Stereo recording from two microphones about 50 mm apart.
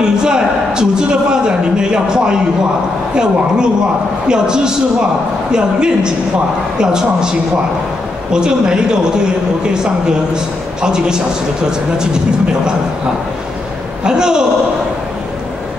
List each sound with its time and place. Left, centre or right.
0.0 s a sound: centre
4.3 s a man's voice: centre
14.0 s a man's voice: centre